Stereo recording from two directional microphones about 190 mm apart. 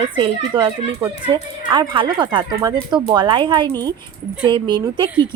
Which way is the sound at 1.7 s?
25° right (ahead or behind).